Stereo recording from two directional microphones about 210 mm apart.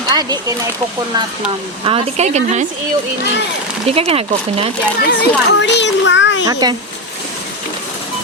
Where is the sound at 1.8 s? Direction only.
25° right (ahead or behind).